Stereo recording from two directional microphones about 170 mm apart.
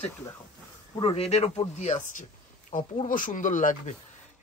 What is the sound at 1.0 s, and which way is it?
Speech, 35° left (ahead or behind).